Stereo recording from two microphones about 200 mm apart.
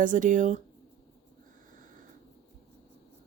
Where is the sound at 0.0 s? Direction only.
40° right (ahead or behind).